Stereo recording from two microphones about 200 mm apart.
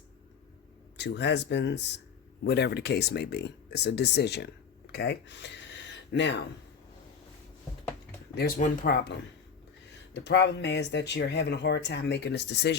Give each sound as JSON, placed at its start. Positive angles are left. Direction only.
{"t": 0.9, "sound": "speech", "side_deg": 60}
{"t": 8.4, "sound": "speech", "side_deg": 45}
{"t": 10.2, "sound": "speech", "side_deg": 60}